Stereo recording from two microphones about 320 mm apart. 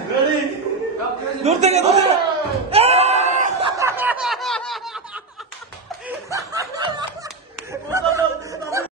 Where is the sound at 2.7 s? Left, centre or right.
Centre.